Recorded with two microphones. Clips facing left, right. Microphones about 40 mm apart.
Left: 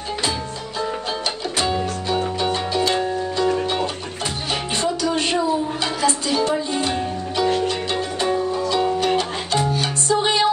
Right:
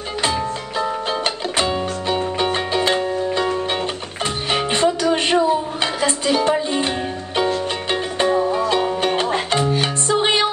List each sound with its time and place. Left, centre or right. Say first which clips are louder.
1.6 s music: right 1 dB; right